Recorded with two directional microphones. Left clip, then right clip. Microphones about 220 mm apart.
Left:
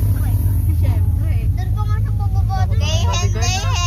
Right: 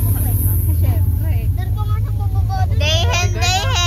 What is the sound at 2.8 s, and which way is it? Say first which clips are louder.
Child singing: right 8 dB; 30° right (ahead or behind).